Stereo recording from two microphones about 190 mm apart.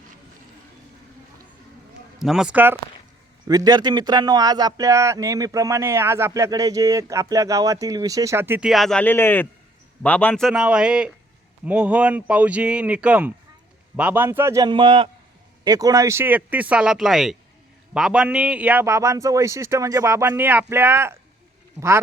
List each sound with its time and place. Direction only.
2.1 s a man's voice: centre (ahead or behind)
3.4 s speech: 20° right (ahead or behind)
8.7 s a man's voice: centre (ahead or behind); by 22.0 s 15° right (ahead or behind)